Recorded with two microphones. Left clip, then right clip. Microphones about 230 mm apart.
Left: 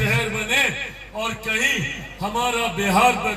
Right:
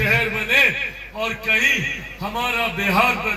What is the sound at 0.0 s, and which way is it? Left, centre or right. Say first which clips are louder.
Chuckle: right 3 dB; left.